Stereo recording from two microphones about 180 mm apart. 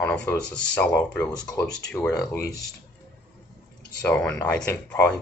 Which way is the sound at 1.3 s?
20° left (ahead or behind).